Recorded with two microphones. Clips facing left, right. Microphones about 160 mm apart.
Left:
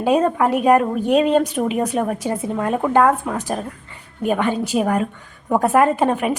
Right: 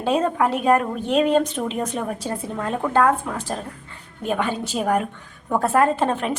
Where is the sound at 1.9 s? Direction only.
20° left (ahead or behind).